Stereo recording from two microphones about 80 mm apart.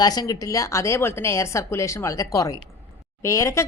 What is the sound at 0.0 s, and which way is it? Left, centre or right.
A woman's voice, left.